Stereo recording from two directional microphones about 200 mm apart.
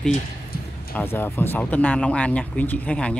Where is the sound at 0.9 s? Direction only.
10° left (ahead or behind).